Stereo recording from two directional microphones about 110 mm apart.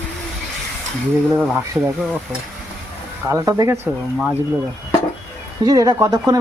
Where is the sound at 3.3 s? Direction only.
30° right (ahead or behind).